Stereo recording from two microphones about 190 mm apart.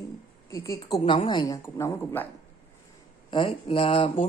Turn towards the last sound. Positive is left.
turn(degrees=30)  # may be behind; listen again after turning